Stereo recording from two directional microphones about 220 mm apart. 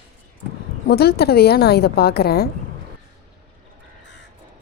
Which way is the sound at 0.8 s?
45° left (ahead or behind).